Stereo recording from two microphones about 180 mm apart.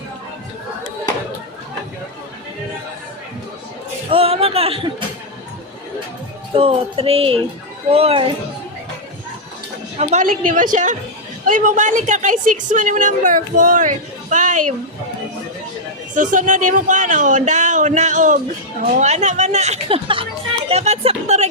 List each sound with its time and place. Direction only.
4.1 s a sound: 30° right (ahead or behind)
6.5 s speech: 30° right (ahead or behind)
10.0 s a woman's voice: 40° right (ahead or behind)
16.1 s a woman's voice: 45° right (ahead or behind)